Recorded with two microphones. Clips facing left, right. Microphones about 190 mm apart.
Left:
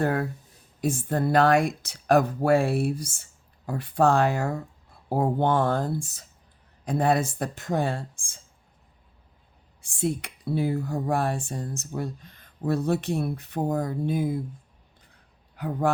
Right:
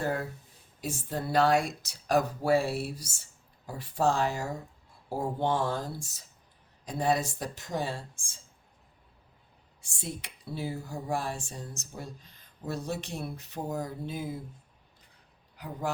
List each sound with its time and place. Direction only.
0.0 s speech: 60° left (ahead or behind)
10.0 s speech: 55° left (ahead or behind)
15.5 s speech: 60° left (ahead or behind)